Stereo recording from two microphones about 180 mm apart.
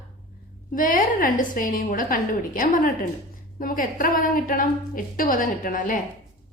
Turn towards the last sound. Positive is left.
turn(degrees=50)  # may be behind; listen again after turning